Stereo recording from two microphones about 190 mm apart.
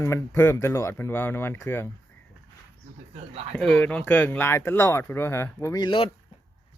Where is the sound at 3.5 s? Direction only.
5° left (ahead or behind); by 6.1 s 25° left (ahead or behind).